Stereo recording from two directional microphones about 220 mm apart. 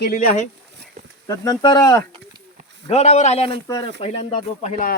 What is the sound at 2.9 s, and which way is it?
Speech, 30° left (ahead or behind).